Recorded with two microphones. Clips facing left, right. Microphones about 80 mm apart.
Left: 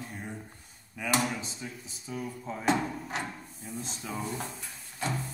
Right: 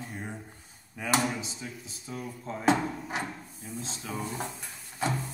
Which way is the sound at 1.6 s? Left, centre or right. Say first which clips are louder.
Even; centre.